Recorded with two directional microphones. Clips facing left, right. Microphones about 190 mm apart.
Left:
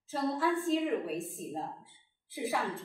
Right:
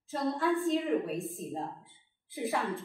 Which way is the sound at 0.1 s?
Centre (ahead or behind).